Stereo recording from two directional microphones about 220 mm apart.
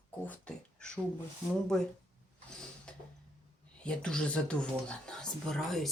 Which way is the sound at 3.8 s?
5° left (ahead or behind).